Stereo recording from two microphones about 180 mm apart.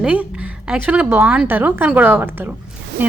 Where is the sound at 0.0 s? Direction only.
5° right (ahead or behind).